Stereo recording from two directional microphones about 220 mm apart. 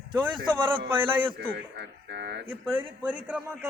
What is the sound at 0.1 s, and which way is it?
A man's voice, 20° right (ahead or behind).